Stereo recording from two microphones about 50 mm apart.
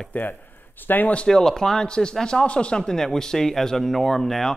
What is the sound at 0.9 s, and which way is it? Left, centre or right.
Speech, left.